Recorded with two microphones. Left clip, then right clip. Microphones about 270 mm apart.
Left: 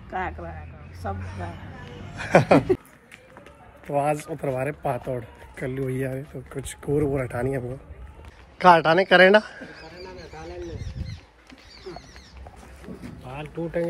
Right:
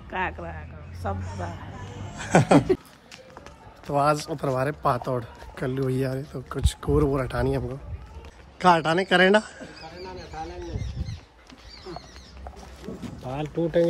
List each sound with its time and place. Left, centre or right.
0.1 s speech: centre
3.8 s speech: centre
13.2 s speech: right